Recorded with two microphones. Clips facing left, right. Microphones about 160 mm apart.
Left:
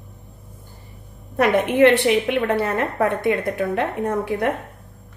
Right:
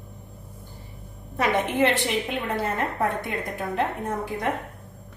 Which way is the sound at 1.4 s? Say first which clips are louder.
Left 7 dB; 60° left (ahead or behind).